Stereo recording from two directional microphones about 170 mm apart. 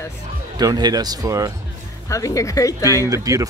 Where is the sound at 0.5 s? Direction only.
25° right (ahead or behind).